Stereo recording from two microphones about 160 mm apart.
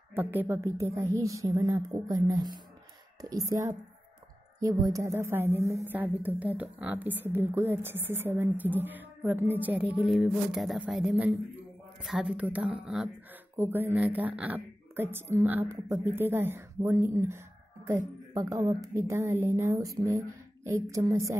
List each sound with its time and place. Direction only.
0.1 s a woman's voice: 10° right (ahead or behind)